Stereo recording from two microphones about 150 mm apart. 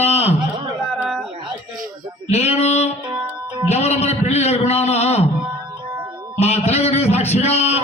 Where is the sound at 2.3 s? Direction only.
45° left (ahead or behind).